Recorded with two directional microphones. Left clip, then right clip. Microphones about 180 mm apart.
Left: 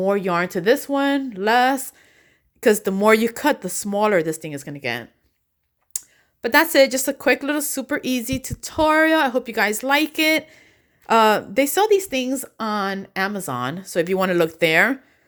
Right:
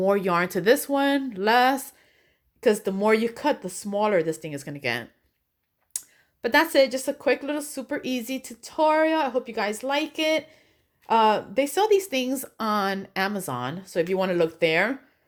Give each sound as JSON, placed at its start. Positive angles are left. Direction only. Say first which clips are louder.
{"t": 0.0, "sound": "a woman's voice", "louder": "left 2 dB", "side_deg": 15}
{"t": 5.9, "sound": "a sound", "louder": "left 5 dB", "side_deg": 10}
{"t": 6.4, "sound": "a woman's voice", "louder": "left 4 dB", "side_deg": 25}